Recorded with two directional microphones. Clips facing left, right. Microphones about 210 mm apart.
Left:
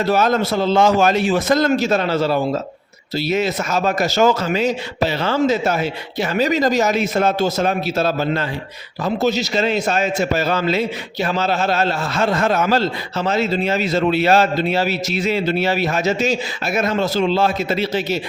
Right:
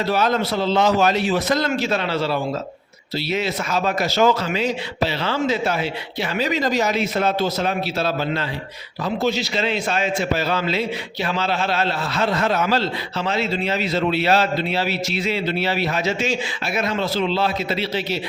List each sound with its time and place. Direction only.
0.0 s a man's voice: 45° left (ahead or behind)